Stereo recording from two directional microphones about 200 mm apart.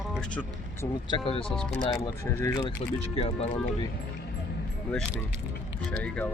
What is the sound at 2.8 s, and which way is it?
Speech, 30° left (ahead or behind).